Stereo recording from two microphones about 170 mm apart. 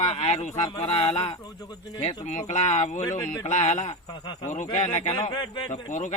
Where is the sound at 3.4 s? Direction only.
40° left (ahead or behind).